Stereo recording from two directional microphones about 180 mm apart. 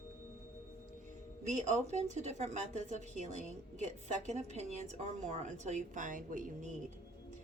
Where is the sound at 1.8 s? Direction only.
40° right (ahead or behind).